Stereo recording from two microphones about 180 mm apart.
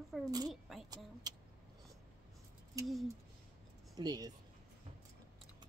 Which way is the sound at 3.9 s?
20° right (ahead or behind).